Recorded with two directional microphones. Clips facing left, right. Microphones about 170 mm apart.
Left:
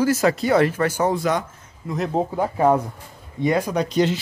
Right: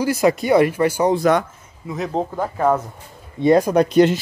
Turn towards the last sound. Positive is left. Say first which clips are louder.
# right 6 dB
turn(degrees=-55)  # may be behind; listen again after turning